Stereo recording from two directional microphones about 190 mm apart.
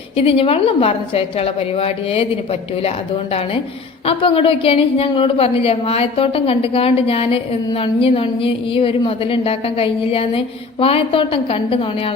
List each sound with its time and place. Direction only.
0.2 s a woman's voice: 30° left (ahead or behind)
4.0 s a woman's voice: 30° left (ahead or behind)